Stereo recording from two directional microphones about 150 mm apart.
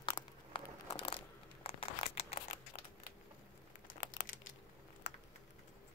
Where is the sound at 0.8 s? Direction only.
40° left (ahead or behind).